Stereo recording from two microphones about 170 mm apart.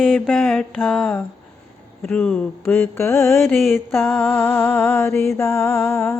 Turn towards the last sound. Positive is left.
turn(degrees=15)  # may be behind; listen again after turning